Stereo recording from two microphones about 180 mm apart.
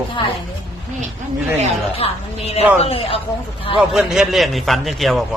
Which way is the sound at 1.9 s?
35° left (ahead or behind).